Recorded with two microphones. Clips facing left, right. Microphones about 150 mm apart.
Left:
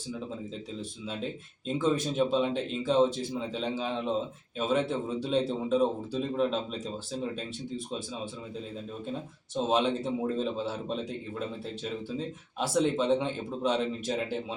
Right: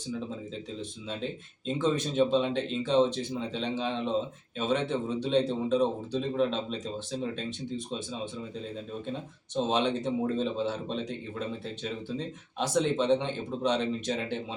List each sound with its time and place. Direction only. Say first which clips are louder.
1.6 s a man's voice: even; 5° left (ahead or behind)
9.6 s a man's voice: left 1 dB; 5° left (ahead or behind)